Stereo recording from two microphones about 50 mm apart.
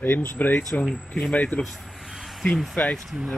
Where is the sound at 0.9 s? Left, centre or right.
Centre.